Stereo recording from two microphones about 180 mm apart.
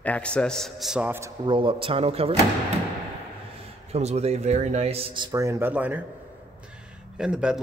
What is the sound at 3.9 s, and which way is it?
Speech, 35° right (ahead or behind).